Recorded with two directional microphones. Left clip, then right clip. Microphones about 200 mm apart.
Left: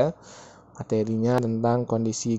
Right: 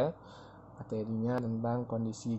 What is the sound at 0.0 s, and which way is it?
Speech, 35° left (ahead or behind).